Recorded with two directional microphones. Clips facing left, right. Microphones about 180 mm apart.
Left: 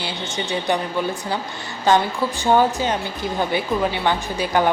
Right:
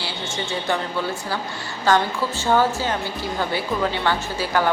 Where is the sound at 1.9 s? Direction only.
20° left (ahead or behind).